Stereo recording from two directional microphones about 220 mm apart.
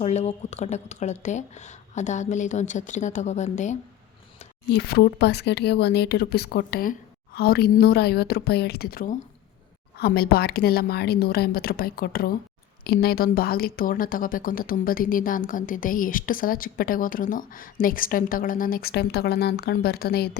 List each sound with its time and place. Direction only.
0.0 s speech: 30° left (ahead or behind)
4.9 s speech: 50° left (ahead or behind)